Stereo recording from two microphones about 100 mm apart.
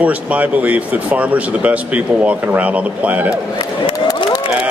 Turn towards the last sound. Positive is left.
turn(degrees=-15)  # may be behind; listen again after turning